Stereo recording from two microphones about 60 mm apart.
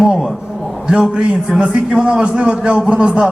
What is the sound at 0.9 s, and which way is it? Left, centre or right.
A man's voice, centre.